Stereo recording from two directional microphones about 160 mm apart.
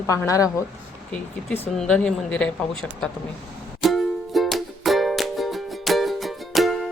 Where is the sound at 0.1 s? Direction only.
20° left (ahead or behind).